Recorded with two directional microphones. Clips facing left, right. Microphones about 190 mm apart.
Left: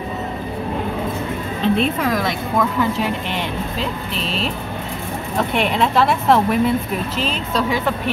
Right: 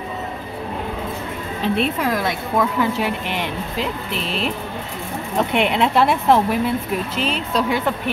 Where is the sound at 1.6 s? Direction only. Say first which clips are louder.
Left 2 dB; 10° right (ahead or behind).